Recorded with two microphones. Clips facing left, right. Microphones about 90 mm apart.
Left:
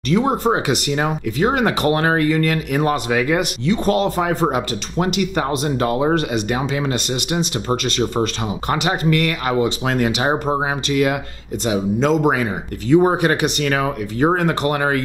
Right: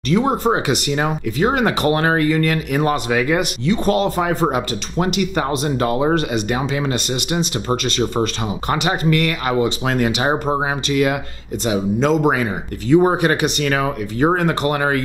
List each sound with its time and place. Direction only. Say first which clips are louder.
0.1 s speech: even; 15° right (ahead or behind)